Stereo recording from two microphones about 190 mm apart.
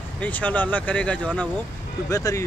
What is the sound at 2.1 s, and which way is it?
Speech, 15° left (ahead or behind).